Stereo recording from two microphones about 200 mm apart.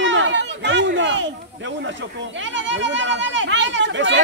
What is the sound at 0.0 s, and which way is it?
Children playing, 65° right (ahead or behind).